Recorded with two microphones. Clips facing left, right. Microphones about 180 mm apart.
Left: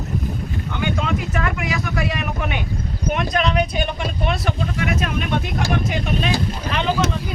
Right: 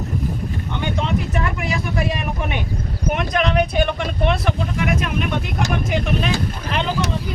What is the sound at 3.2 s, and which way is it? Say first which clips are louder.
Speech: right 1 dB; 55° right (ahead or behind).